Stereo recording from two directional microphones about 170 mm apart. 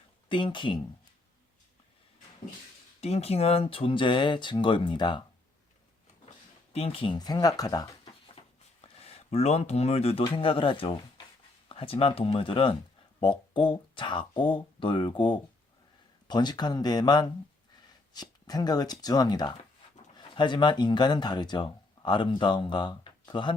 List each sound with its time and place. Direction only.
0.3 s speech: 30° left (ahead or behind)
3.0 s speech: 40° left (ahead or behind)
6.7 s speech: 35° left (ahead or behind)
8.4 s speech: 35° left (ahead or behind)